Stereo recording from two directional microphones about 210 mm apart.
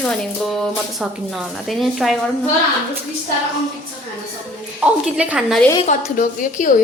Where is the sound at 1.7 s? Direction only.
Centre (ahead or behind).